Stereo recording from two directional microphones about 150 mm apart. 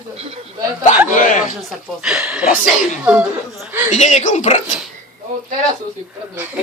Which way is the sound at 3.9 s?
50° left (ahead or behind).